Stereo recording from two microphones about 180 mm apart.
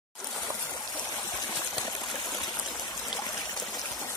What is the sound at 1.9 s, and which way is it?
Stream, 20° left (ahead or behind).